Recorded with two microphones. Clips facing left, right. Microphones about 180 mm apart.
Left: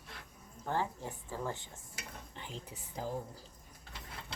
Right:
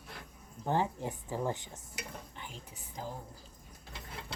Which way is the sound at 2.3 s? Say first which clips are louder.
Left 2 dB; 30° left (ahead or behind).